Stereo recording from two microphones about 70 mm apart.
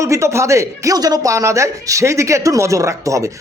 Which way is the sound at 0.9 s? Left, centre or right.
Right.